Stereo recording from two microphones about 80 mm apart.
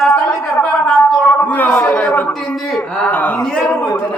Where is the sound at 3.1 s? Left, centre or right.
Left.